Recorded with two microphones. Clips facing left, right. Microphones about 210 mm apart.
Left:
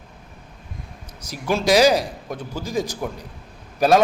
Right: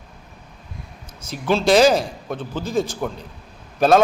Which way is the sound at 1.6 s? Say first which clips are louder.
Right 1 dB; 10° left (ahead or behind).